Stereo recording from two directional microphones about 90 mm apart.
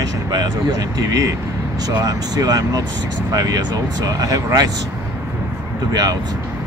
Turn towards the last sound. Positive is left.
turn(degrees=-45)  # may be behind; listen again after turning